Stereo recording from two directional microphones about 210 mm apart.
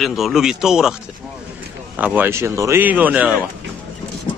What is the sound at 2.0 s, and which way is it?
Speech, 10° right (ahead or behind).